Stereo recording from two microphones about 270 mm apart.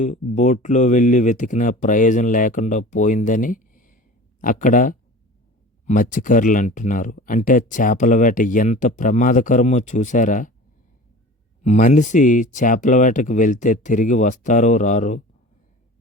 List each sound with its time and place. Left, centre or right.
0.0 s speech: left
11.6 s speech: left